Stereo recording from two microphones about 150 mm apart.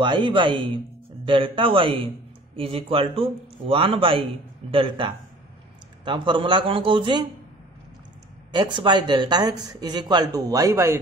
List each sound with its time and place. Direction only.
0.0 s speech: 30° right (ahead or behind)
8.5 s a man's voice: 30° right (ahead or behind)